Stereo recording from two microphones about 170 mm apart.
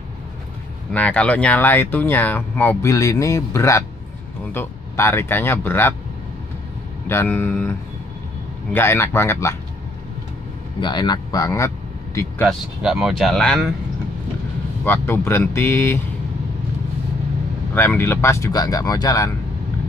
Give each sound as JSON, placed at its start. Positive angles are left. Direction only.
{"t": 0.9, "sound": "speech", "side_deg": 5}
{"t": 7.1, "sound": "speech", "side_deg": 15}
{"t": 8.7, "sound": "speech", "side_deg": 15}
{"t": 10.8, "sound": "speech", "side_deg": 25}
{"t": 12.4, "sound": "speech", "side_deg": 0}
{"t": 14.9, "sound": "speech", "side_deg": 15}
{"t": 17.7, "sound": "speech", "side_deg": 15}